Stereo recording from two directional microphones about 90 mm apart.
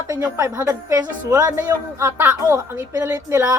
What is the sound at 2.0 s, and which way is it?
Speech, 25° right (ahead or behind).